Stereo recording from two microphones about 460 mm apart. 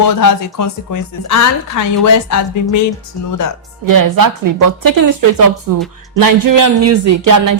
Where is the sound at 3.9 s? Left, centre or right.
Right.